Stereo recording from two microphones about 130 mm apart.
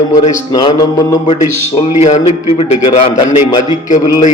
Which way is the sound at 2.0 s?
60° left (ahead or behind).